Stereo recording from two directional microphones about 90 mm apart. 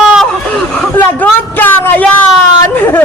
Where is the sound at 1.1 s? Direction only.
20° left (ahead or behind).